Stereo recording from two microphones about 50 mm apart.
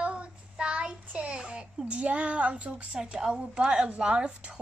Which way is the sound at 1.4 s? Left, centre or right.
Centre.